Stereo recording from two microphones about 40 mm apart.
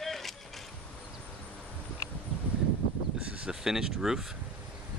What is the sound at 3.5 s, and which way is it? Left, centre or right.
Speech, centre.